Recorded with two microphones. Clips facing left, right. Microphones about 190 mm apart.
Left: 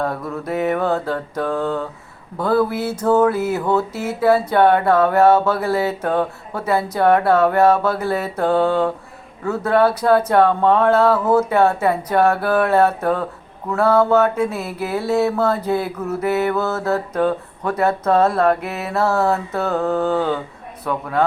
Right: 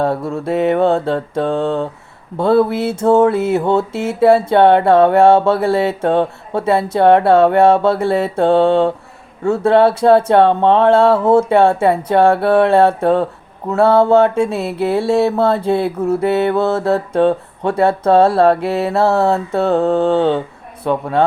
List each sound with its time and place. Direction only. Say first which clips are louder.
0.0 s mantra: right 6 dB; 30° right (ahead or behind)